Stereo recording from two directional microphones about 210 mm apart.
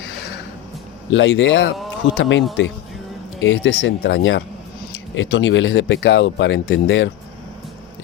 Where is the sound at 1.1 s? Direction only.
60° left (ahead or behind).